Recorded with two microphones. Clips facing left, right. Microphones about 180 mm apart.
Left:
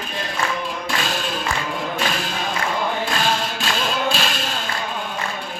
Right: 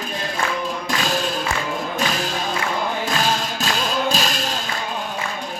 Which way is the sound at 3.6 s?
40° right (ahead or behind).